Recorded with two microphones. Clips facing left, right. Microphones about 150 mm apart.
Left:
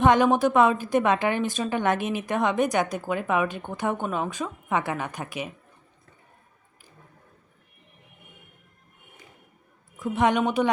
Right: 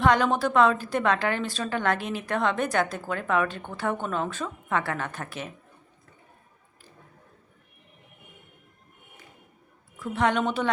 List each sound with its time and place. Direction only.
0.0 s a woman's voice: 20° left (ahead or behind)
10.0 s a woman's voice: 15° left (ahead or behind)